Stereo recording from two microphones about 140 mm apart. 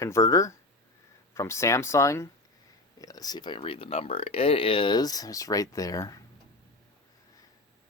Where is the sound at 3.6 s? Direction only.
45° left (ahead or behind); by 6.2 s 25° left (ahead or behind).